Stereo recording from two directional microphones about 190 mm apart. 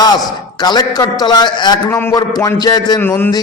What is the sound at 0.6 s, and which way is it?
A man's voice, 20° left (ahead or behind).